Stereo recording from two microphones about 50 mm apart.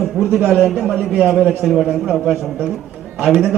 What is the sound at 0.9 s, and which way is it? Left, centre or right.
Speech, right.